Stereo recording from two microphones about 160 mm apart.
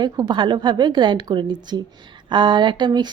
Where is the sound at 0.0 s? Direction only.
25° right (ahead or behind).